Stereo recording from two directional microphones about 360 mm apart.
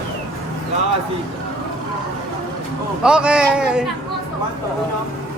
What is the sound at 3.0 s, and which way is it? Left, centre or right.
Speech, centre.